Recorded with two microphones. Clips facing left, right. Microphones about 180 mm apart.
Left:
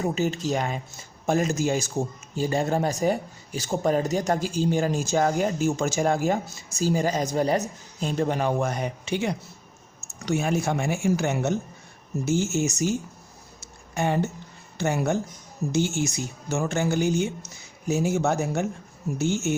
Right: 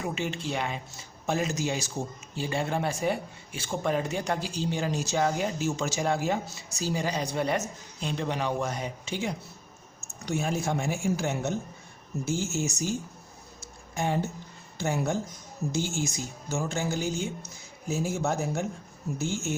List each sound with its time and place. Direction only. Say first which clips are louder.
0.0 s speech: left 6 dB; 40° left (ahead or behind); by 12.9 s 70° left (ahead or behind)
13.6 s a sound: left 4 dB; 65° left (ahead or behind)
14.8 s speech: left 4 dB; 70° left (ahead or behind)